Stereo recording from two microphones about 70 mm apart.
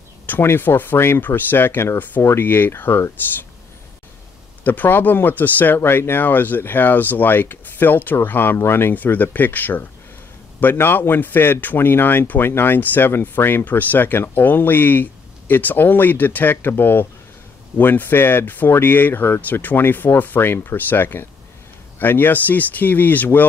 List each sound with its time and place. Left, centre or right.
0.3 s speech: left
4.6 s speech: left